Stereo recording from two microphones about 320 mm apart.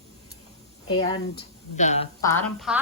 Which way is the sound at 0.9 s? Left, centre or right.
Centre.